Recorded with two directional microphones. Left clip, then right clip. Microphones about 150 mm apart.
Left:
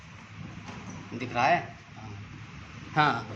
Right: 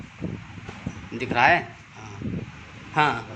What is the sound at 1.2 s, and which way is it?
Speech, 35° right (ahead or behind).